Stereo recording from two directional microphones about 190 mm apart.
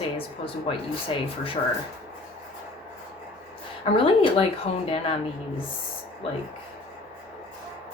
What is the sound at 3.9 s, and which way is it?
Speech, 30° left (ahead or behind).